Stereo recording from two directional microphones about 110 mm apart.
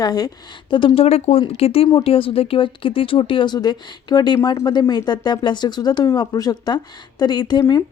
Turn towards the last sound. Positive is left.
turn(degrees=40)  # may be behind; listen again after turning